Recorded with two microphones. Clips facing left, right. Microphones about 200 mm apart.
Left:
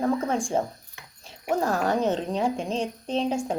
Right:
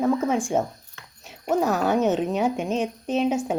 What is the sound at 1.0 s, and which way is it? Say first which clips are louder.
Dog: even; 15° left (ahead or behind).